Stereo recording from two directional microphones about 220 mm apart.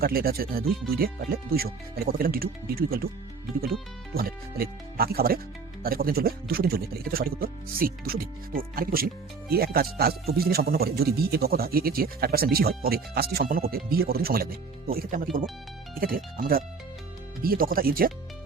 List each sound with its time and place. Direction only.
0.0 s speech: 45° right (ahead or behind)
4.1 s speech: 45° right (ahead or behind)